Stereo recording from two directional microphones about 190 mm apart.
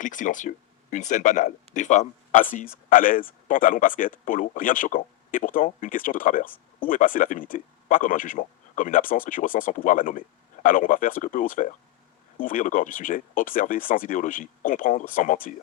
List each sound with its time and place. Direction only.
0.0 s speech: 45° left (ahead or behind)